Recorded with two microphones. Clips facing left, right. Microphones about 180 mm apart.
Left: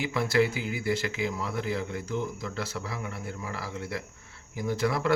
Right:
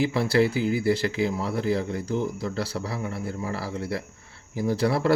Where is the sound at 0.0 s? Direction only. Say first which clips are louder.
Right 4 dB; 35° right (ahead or behind).